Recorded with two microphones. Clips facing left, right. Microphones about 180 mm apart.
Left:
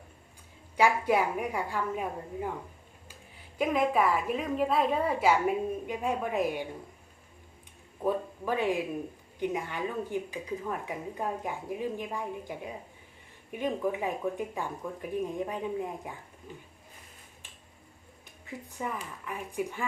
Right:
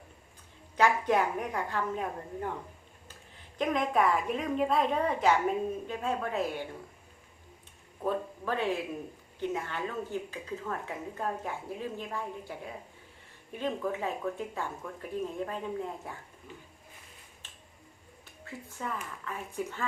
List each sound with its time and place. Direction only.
0.8 s a woman's voice: 10° left (ahead or behind)
3.6 s a woman's voice: 5° left (ahead or behind)
8.0 s a woman's voice: 15° left (ahead or behind)
17.4 s finger snapping: 10° left (ahead or behind)
18.4 s a woman's voice: 15° left (ahead or behind)